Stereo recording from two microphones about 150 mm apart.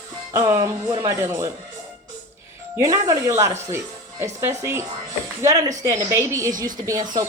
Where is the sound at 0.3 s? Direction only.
20° right (ahead or behind).